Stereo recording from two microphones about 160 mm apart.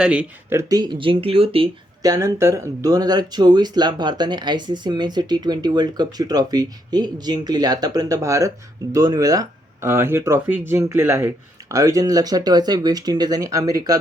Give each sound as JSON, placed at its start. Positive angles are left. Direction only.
{"t": 0.0, "sound": "speech", "side_deg": -5}
{"t": 0.7, "sound": "speech", "side_deg": -25}
{"t": 2.0, "sound": "speech", "side_deg": -20}